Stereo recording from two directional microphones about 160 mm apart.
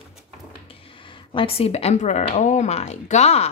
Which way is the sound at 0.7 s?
35° left (ahead or behind).